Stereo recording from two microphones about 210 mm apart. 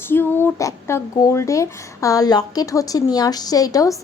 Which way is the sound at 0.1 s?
10° left (ahead or behind).